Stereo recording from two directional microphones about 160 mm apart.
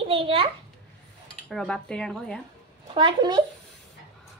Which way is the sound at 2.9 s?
30° right (ahead or behind).